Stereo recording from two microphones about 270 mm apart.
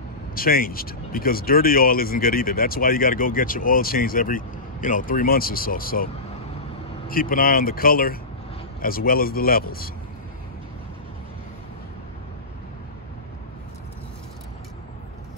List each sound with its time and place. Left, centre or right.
0.3 s speech: left
7.1 s speech: left